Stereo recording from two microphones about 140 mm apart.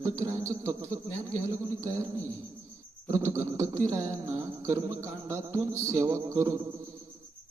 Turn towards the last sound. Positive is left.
turn(degrees=-20)  # may be behind; listen again after turning